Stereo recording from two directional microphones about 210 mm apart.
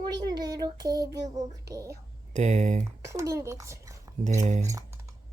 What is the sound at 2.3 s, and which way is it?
Speech, 35° right (ahead or behind).